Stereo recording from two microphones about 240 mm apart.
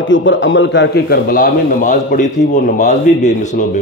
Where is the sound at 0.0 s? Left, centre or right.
Left.